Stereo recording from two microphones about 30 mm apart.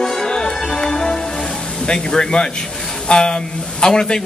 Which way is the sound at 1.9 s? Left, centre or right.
Left.